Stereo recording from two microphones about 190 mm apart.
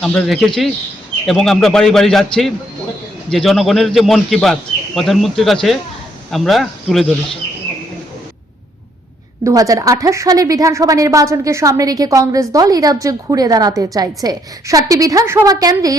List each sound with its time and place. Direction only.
0.0 s a man's voice: 5° left (ahead or behind)
9.4 s a woman's voice: 15° right (ahead or behind)